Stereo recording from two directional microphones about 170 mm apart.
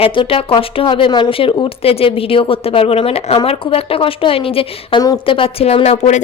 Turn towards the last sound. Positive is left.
turn(degrees=40)  # may be behind; listen again after turning